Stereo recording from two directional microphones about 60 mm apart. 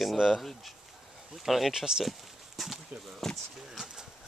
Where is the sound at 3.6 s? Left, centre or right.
Centre.